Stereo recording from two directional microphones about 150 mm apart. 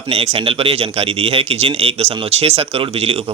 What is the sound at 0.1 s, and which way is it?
A man's voice, 40° right (ahead or behind).